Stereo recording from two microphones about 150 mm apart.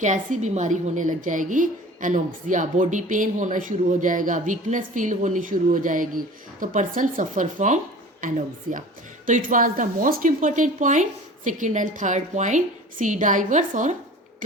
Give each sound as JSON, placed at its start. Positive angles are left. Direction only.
{"t": 0.0, "sound": "a woman's voice", "side_deg": -55}